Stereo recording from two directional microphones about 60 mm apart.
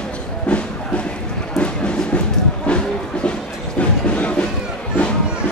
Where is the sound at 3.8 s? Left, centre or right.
Left.